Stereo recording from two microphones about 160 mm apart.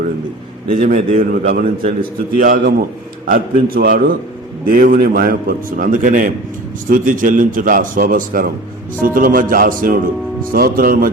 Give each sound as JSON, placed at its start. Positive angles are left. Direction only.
{"t": 0.7, "sound": "a man's voice", "side_deg": -55}